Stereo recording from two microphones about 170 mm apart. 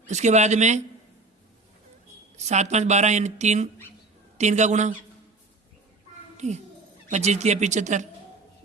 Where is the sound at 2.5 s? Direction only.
40° right (ahead or behind).